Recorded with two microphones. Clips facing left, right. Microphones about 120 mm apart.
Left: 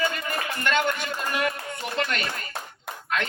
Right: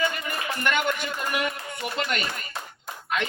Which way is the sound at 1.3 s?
10° right (ahead or behind).